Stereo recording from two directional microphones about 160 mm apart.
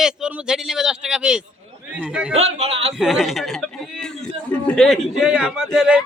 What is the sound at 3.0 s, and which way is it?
A man's voice, 5° right (ahead or behind).